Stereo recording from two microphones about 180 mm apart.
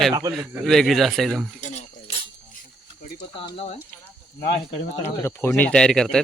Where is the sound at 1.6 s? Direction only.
40° left (ahead or behind).